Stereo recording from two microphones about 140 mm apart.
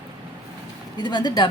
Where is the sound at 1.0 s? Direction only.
30° left (ahead or behind).